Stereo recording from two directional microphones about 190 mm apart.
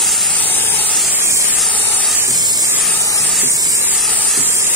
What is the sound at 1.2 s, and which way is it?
Spray, 15° right (ahead or behind).